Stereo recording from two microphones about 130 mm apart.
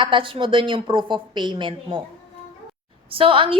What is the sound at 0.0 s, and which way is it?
A woman's voice, 40° right (ahead or behind).